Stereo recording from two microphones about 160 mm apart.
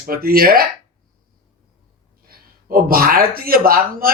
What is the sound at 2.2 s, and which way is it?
Speech, 65° right (ahead or behind).